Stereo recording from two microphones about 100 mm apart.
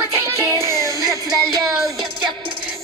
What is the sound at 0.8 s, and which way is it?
Music, 35° right (ahead or behind).